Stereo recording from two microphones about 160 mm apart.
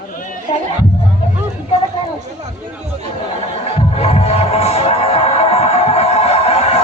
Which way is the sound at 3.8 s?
40° left (ahead or behind).